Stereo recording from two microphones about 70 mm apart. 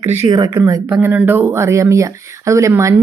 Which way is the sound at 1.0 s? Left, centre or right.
Right.